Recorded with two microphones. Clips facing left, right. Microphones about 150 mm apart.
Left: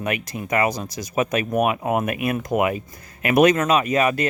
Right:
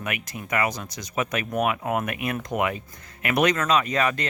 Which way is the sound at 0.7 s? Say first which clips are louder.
Left 6 dB; 20° left (ahead or behind).